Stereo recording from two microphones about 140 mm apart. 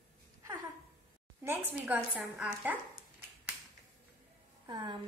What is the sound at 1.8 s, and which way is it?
Speech, 10° right (ahead or behind).